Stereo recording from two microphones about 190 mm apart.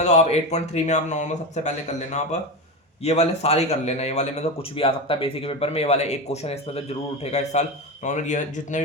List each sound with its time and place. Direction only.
0.0 s a man's voice: 35° left (ahead or behind)